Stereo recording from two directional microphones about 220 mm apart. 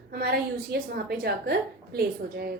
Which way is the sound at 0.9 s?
45° right (ahead or behind).